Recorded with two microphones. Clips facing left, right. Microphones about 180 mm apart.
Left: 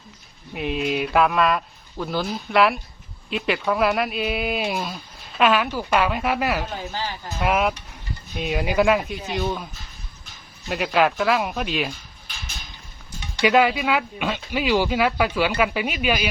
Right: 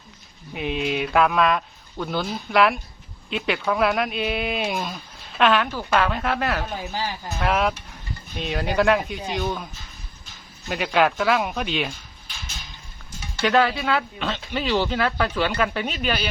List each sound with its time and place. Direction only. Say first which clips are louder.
0.5 s speech: left 1 dB; centre (ahead or behind)
6.7 s speech: right 1 dB; 10° right (ahead or behind)
7.3 s speech: left 1 dB; 5° left (ahead or behind)
10.7 s speech: even; centre (ahead or behind)
13.3 s speech: left 2 dB; 10° left (ahead or behind)